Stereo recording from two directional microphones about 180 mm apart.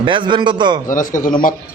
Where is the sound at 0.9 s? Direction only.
45° left (ahead or behind).